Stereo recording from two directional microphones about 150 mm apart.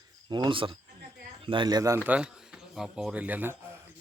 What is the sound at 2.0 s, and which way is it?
Speech, 10° right (ahead or behind).